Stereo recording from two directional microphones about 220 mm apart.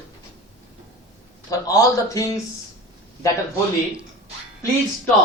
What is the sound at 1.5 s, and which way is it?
Speech, 15° left (ahead or behind).